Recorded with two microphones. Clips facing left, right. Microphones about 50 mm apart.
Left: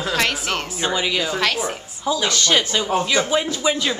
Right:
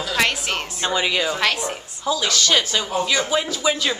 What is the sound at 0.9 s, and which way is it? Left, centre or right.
Speech, centre.